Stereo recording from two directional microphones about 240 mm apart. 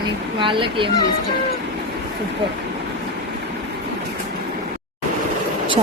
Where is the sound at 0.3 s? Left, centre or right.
Right.